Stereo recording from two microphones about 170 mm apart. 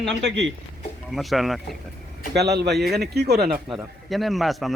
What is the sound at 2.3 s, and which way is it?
Speech, 75° right (ahead or behind).